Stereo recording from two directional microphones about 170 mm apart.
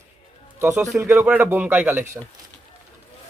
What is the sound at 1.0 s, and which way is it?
Speech, 10° right (ahead or behind).